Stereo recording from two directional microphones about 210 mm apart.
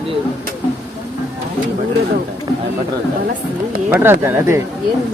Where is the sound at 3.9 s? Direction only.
10° right (ahead or behind).